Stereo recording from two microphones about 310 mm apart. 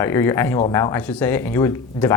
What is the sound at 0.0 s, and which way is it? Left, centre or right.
Speech, centre.